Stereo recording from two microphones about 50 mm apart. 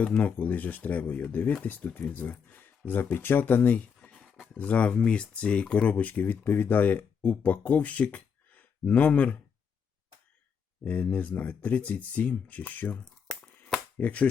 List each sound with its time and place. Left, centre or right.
0.2 s speech: left
2.5 s speech: left
10.8 s speech: left
14.0 s speech: left